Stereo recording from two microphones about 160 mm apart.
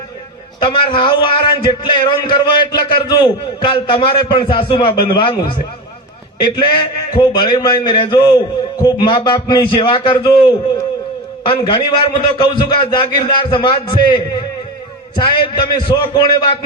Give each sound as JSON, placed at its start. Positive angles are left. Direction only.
{"t": 0.6, "sound": "a man's voice", "side_deg": 30}
{"t": 15.7, "sound": "a man's voice", "side_deg": 30}